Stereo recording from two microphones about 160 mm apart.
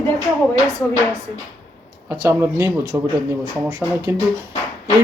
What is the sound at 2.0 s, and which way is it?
Speech, 15° right (ahead or behind).